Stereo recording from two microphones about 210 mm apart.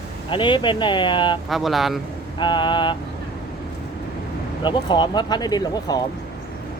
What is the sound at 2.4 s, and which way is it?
Speech, 20° left (ahead or behind).